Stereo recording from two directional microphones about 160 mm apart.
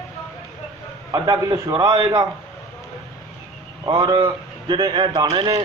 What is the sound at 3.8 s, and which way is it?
A man's voice, 25° right (ahead or behind).